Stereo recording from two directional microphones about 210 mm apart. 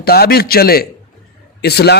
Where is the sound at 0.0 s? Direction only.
45° left (ahead or behind).